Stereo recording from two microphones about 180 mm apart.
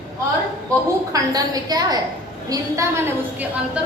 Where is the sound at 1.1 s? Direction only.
20° right (ahead or behind).